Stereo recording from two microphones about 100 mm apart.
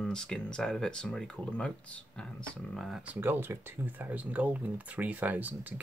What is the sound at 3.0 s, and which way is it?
Speech, 20° right (ahead or behind).